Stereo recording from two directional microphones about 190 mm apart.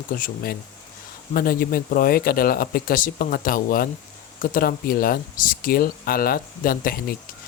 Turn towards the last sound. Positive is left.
turn(degrees=50)  # may be behind; listen again after turning